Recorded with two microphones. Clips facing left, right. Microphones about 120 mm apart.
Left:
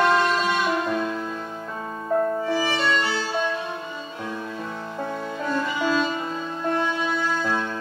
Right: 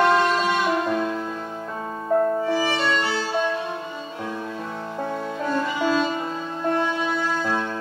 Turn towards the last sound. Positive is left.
turn(degrees=-45)  # may be behind; listen again after turning